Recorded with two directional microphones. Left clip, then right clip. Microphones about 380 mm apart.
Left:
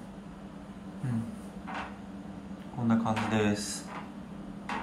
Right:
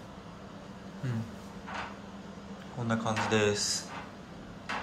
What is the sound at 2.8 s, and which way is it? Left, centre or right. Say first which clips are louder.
Speech: left 1 dB; centre.